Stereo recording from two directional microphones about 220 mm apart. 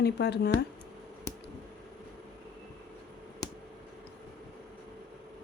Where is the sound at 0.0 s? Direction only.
50° left (ahead or behind).